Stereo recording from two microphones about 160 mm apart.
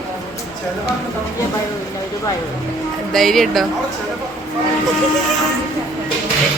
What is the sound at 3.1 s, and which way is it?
Speech, centre (ahead or behind).